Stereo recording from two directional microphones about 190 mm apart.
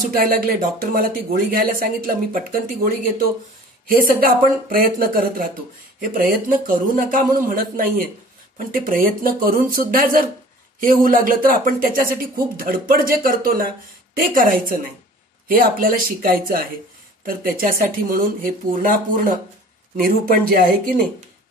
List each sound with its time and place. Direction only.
0.1 s speech: 50° right (ahead or behind)